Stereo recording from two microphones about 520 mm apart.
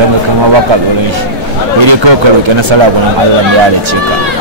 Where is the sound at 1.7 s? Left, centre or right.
Right.